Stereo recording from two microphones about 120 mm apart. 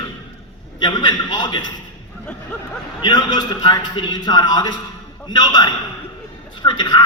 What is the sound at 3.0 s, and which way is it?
A man's voice, 40° left (ahead or behind).